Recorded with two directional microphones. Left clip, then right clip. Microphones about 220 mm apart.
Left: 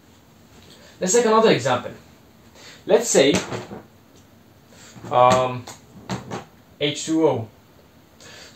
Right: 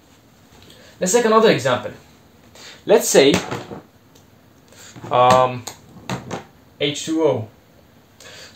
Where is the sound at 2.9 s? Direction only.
50° right (ahead or behind).